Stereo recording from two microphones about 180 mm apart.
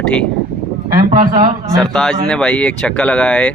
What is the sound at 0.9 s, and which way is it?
Speech, 50° right (ahead or behind).